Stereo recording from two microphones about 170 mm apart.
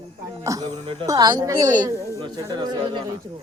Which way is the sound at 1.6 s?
50° right (ahead or behind).